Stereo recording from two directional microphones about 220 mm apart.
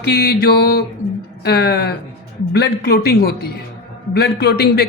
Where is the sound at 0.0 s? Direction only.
45° left (ahead or behind).